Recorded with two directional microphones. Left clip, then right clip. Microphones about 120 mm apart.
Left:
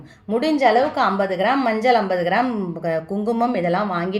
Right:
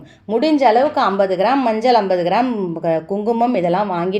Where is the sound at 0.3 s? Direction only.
40° right (ahead or behind).